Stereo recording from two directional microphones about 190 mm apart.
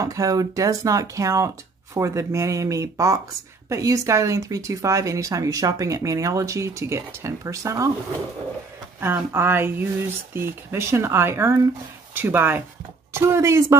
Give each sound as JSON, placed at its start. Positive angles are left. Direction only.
{"t": 0.0, "sound": "speech", "side_deg": -20}
{"t": 9.0, "sound": "speech", "side_deg": -10}